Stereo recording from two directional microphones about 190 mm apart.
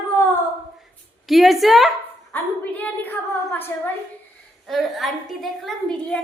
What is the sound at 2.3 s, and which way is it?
A woman's voice, 10° left (ahead or behind).